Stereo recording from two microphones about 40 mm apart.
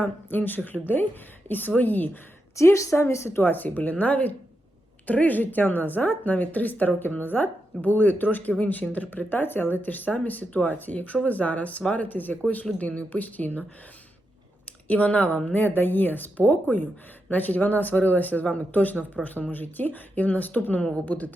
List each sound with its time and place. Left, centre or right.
0.0 s a woman's voice: left
2.6 s speech: left
3.4 s speech: left
9.1 s speech: left
12.0 s speech: left
14.8 s speech: left
15.5 s speech: left